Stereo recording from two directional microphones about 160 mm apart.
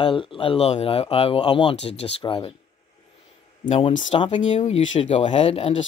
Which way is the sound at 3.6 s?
35° left (ahead or behind).